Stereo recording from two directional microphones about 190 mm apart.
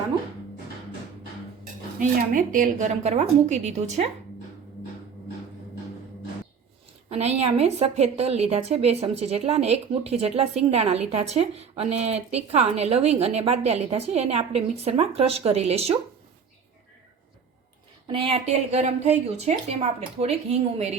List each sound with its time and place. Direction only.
2.0 s speech: 45° right (ahead or behind)
7.1 s speech: 35° right (ahead or behind)
18.1 s speech: 30° right (ahead or behind)